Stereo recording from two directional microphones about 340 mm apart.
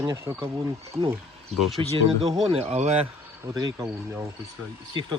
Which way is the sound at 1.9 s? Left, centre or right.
Centre.